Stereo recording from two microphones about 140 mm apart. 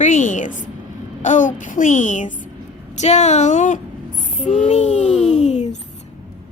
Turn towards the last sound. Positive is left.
turn(degrees=55)  # may be behind; listen again after turning